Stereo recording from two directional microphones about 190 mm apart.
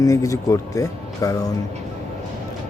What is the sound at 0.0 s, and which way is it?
Speech, 20° left (ahead or behind).